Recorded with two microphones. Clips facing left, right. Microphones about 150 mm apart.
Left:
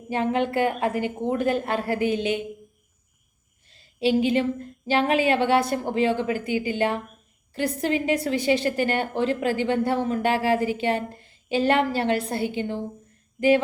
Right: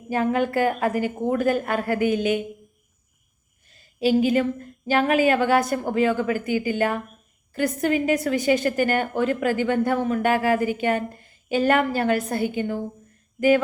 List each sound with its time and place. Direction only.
0.1 s a woman's voice: 25° left (ahead or behind)
3.7 s a woman's voice: 30° left (ahead or behind)